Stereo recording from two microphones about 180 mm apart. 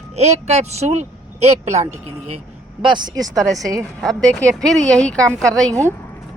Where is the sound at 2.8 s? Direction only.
25° right (ahead or behind).